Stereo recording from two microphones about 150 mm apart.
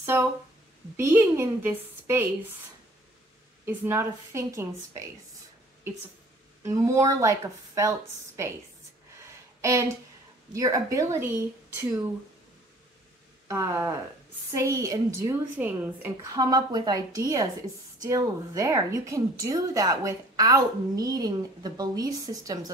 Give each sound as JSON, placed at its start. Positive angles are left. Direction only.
{"t": 0.0, "sound": "a woman's voice", "side_deg": -15}
{"t": 3.6, "sound": "a woman's voice", "side_deg": -15}
{"t": 6.6, "sound": "a woman's voice", "side_deg": -20}
{"t": 9.2, "sound": "a sound", "side_deg": -20}
{"t": 10.5, "sound": "a woman's voice", "side_deg": -20}
{"t": 13.5, "sound": "a woman's voice", "side_deg": -20}
{"t": 16.3, "sound": "a woman's voice", "side_deg": -25}